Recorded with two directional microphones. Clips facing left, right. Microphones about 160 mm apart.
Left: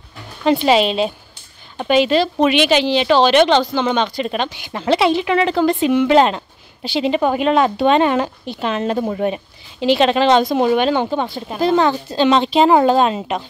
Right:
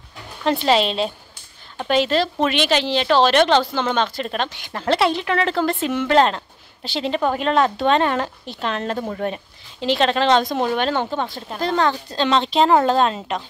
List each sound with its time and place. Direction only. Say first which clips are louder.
0.4 s speech: left 4 dB; 5° left (ahead or behind)